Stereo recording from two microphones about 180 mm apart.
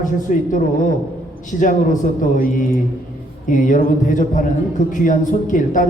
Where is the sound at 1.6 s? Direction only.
45° left (ahead or behind).